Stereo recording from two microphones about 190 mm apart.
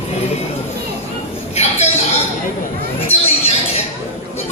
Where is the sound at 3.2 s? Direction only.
30° left (ahead or behind).